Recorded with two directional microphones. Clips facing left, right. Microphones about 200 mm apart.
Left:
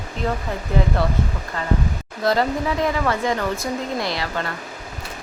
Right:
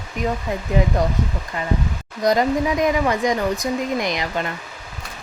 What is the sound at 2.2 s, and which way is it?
Speech, 15° right (ahead or behind).